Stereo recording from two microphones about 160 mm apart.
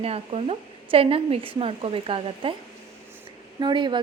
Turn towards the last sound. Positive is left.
turn(degrees=-30)  # may be behind; listen again after turning